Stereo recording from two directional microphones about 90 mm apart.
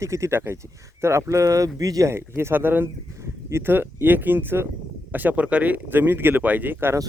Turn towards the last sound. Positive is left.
turn(degrees=-25)  # may be behind; listen again after turning